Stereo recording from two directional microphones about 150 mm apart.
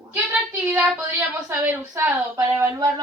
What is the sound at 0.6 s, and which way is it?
A woman's voice, 10° right (ahead or behind).